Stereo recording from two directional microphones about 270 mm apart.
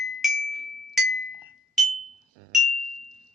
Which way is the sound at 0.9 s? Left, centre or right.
Centre.